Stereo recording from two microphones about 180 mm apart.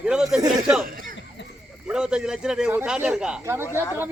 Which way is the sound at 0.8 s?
50° right (ahead or behind).